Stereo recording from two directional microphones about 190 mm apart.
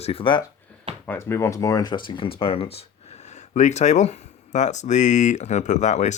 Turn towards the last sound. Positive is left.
turn(degrees=40)  # may be behind; listen again after turning